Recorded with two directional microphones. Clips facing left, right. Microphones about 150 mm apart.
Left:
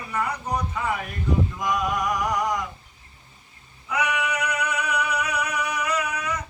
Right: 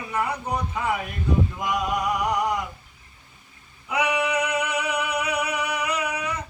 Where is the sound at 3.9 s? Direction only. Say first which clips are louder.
Right 2 dB; 30° right (ahead or behind).